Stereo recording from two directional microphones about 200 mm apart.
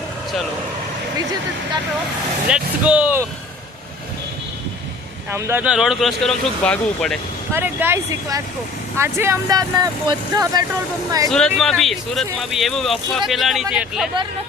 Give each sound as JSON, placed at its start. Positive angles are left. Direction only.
{"t": 2.5, "sound": "speech", "side_deg": -5}
{"t": 5.3, "sound": "speech", "side_deg": -10}
{"t": 7.5, "sound": "speech", "side_deg": -10}
{"t": 11.3, "sound": "speech", "side_deg": 0}